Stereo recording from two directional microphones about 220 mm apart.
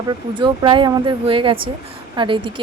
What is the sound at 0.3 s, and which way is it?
A woman's voice, 20° right (ahead or behind).